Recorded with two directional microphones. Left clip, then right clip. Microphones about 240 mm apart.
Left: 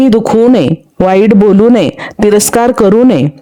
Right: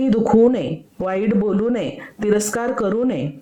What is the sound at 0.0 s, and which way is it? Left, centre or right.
Speech, left.